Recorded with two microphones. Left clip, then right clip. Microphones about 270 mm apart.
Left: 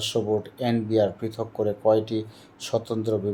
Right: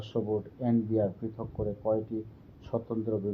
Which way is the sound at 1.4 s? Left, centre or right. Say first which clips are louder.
Left 10 dB; centre.